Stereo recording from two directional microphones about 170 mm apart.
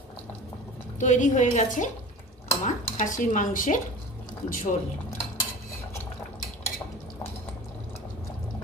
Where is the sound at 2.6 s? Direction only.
45° left (ahead or behind).